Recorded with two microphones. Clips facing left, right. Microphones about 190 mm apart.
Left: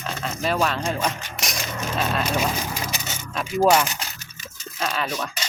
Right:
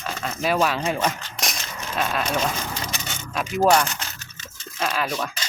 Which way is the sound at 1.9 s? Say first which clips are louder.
Even; 5° left (ahead or behind).